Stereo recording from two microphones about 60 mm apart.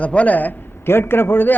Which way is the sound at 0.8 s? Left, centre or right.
Left.